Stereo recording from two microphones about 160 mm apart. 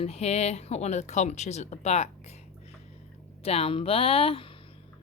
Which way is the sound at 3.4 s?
40° left (ahead or behind).